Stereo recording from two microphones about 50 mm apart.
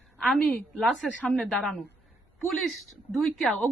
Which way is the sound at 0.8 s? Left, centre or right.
Centre.